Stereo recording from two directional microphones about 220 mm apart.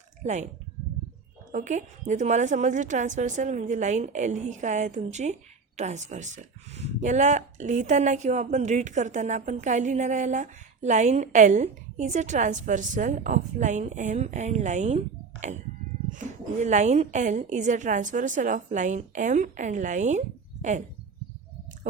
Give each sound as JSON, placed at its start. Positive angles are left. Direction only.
{"t": 0.2, "sound": "a woman's voice", "side_deg": -30}
{"t": 1.5, "sound": "a woman's voice", "side_deg": -35}